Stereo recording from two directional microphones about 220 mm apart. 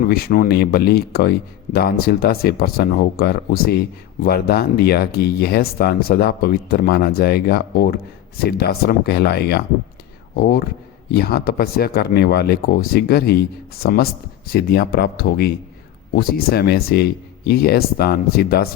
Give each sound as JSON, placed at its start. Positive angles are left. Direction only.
{"t": 0.1, "sound": "speech", "side_deg": 40}